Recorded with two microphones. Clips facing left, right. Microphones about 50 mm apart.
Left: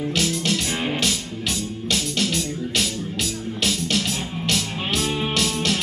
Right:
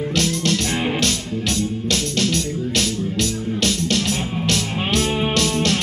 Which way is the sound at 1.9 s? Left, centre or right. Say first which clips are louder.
Even; centre.